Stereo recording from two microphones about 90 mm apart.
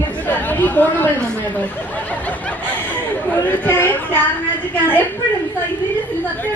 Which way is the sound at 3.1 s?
20° left (ahead or behind).